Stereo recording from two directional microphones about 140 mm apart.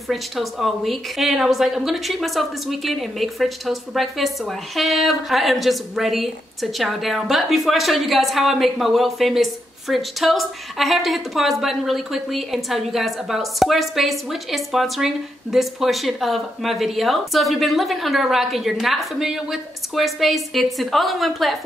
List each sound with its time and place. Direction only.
0.1 s a woman's voice: centre (ahead or behind)